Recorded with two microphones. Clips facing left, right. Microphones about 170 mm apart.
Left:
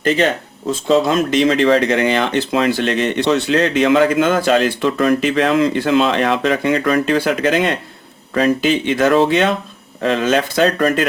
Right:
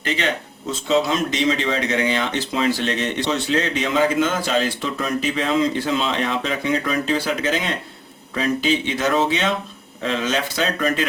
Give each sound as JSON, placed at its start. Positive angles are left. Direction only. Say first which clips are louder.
{"t": 0.9, "sound": "speech", "louder": "left 5 dB", "side_deg": 55}